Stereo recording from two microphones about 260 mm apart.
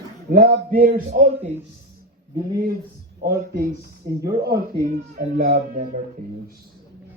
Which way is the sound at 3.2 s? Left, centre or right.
Right.